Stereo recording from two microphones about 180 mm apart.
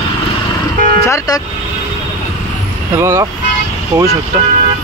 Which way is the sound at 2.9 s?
15° right (ahead or behind).